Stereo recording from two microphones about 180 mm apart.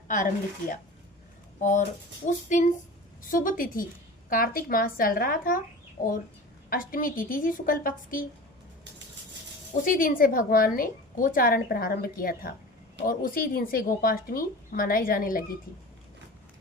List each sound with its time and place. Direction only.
0.1 s a woman's voice: 45° left (ahead or behind)
9.8 s a woman's voice: 50° left (ahead or behind)